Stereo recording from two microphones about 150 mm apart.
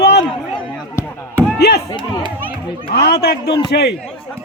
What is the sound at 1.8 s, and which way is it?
Speech, 30° left (ahead or behind).